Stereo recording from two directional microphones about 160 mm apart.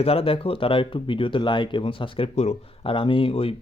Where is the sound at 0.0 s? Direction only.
35° left (ahead or behind).